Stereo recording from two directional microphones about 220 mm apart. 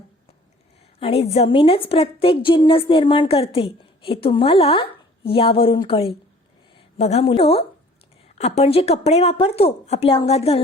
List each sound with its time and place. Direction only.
0.9 s a woman's voice: 25° left (ahead or behind)